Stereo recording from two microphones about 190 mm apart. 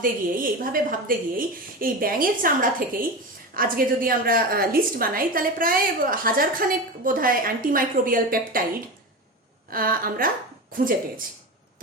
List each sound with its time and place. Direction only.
0.0 s a woman's voice: 45° right (ahead or behind)
9.6 s a woman's voice: 50° right (ahead or behind)